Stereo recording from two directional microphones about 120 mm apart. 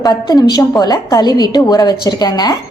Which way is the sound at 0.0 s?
35° left (ahead or behind).